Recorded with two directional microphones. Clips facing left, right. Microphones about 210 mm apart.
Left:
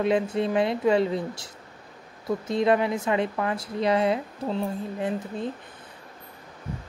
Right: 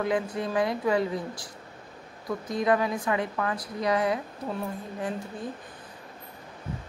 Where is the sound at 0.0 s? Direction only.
25° left (ahead or behind).